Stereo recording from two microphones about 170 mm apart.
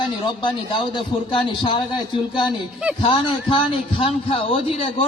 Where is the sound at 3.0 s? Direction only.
30° left (ahead or behind).